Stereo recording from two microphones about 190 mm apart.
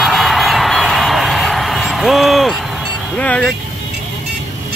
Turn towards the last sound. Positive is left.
turn(degrees=5)  # may be behind; listen again after turning